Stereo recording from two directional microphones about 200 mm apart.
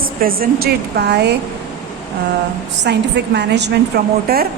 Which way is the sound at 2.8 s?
60° right (ahead or behind).